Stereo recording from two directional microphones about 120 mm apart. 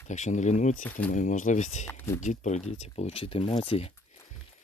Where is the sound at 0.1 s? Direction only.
80° left.